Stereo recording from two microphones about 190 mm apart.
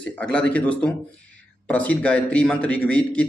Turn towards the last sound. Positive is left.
turn(degrees=5)  # may be behind; listen again after turning